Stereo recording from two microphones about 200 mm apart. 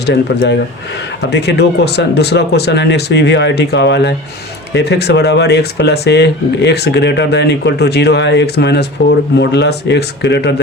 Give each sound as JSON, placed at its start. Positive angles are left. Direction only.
{"t": 0.0, "sound": "speech", "side_deg": 55}